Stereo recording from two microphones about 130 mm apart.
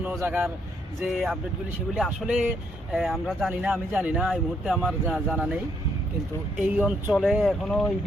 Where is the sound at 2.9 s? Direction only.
Centre (ahead or behind).